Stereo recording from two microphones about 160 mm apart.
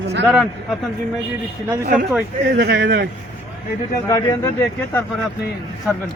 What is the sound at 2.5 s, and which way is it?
Speech, 90° right.